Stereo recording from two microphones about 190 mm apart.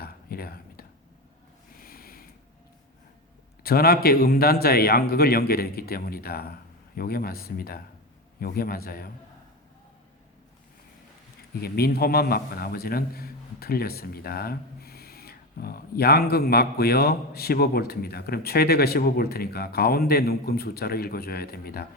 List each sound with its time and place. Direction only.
0.0 s a sound: 55° left (ahead or behind)
3.6 s a man's voice: 55° left (ahead or behind)
11.6 s a man's voice: 55° left (ahead or behind)